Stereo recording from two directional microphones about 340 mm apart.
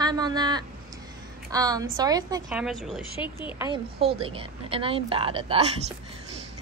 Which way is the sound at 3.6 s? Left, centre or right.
Centre.